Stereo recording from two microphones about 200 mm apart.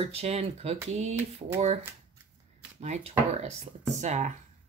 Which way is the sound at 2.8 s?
35° right (ahead or behind).